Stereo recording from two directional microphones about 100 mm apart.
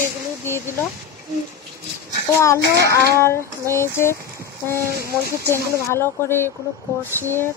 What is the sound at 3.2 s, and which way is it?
Speech, 25° left (ahead or behind).